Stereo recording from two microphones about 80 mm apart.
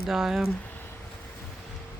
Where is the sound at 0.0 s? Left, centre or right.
Centre.